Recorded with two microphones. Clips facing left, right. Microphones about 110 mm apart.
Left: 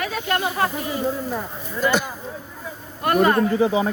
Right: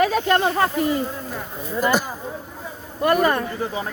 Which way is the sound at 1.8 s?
45° right (ahead or behind).